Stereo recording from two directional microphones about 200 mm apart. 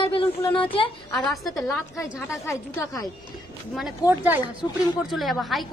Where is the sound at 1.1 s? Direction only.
Centre (ahead or behind).